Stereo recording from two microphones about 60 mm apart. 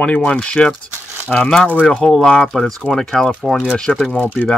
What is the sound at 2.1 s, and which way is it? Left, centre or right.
Speech, centre.